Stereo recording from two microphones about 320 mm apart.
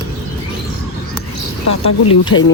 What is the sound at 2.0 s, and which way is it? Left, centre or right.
Speech, left.